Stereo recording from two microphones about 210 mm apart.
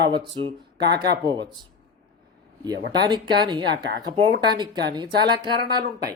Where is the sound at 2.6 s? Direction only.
20° right (ahead or behind).